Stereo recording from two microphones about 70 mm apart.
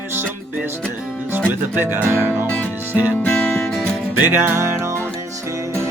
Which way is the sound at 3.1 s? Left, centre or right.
Left.